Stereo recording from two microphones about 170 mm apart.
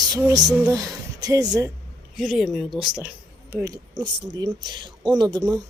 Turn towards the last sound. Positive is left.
turn(degrees=-25)  # may be behind; listen again after turning